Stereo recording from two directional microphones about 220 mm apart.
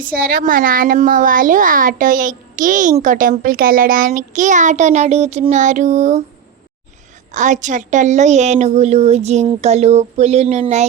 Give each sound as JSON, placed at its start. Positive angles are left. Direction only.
{"t": 0.0, "sound": "a woman's voice", "side_deg": -40}
{"t": 7.3, "sound": "a woman's voice", "side_deg": -35}